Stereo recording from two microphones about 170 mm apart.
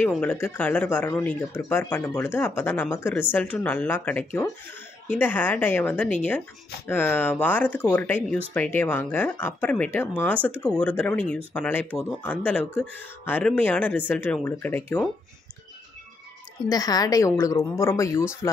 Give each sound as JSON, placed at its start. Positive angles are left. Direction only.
{"t": 0.2, "sound": "speech", "side_deg": 10}
{"t": 16.6, "sound": "a woman's voice", "side_deg": 20}